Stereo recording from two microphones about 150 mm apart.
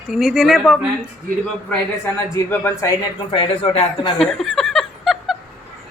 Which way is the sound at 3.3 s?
35° left (ahead or behind).